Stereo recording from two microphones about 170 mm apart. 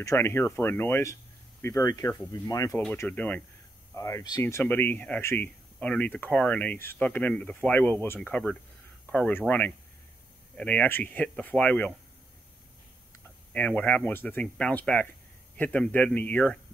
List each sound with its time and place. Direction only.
0.0 s speech: 15° left (ahead or behind)
13.5 s speech: 10° left (ahead or behind)